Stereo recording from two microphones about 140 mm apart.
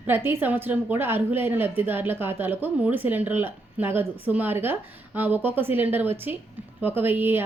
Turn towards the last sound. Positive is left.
turn(degrees=-15)  # may be behind; listen again after turning